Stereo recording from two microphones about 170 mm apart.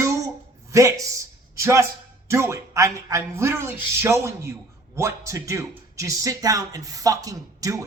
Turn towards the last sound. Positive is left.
turn(degrees=-20)  # may be behind; listen again after turning